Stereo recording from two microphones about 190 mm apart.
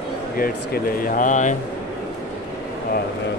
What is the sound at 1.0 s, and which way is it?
Speech, 45° left (ahead or behind).